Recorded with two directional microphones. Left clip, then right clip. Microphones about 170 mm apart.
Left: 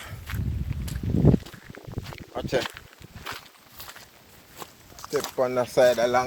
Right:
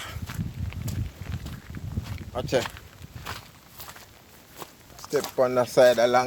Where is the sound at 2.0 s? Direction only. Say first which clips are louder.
Right 1 dB; 10° right (ahead or behind).